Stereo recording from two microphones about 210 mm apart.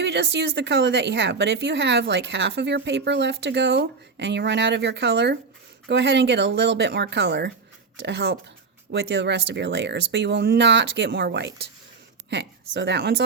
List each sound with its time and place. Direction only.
0.0 s a woman's voice: 55° right (ahead or behind)